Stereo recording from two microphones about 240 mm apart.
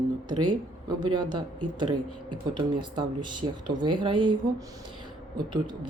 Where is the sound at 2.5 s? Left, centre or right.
Centre.